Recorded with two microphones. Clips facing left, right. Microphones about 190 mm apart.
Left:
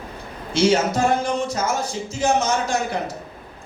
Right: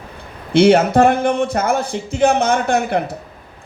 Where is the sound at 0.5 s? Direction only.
60° right (ahead or behind).